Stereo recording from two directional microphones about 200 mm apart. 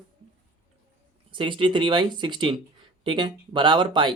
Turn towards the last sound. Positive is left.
turn(degrees=-25)  # may be behind; listen again after turning